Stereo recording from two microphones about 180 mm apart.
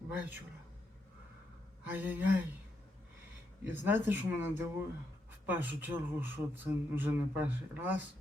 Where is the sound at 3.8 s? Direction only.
10° right (ahead or behind).